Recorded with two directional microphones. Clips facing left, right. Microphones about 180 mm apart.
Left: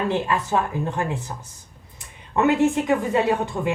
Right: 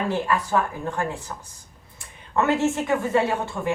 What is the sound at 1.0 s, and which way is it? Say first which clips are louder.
Speech: even; 20° left (ahead or behind).